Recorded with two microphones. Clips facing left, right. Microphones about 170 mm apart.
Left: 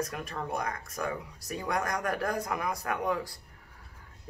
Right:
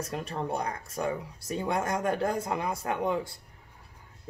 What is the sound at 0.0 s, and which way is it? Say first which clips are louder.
Speech: right 2 dB; 30° right (ahead or behind).